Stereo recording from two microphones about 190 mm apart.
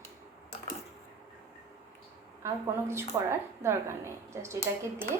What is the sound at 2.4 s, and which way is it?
A woman's voice, 15° right (ahead or behind).